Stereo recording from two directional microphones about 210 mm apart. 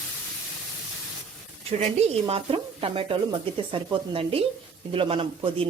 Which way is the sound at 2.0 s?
30° right (ahead or behind).